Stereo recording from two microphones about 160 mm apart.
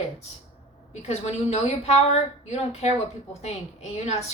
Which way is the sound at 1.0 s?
40° left (ahead or behind).